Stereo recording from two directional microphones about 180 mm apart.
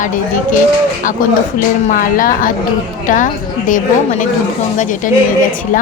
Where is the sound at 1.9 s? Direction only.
50° left (ahead or behind).